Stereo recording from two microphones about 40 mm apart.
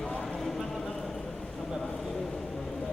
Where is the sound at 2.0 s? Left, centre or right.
Centre.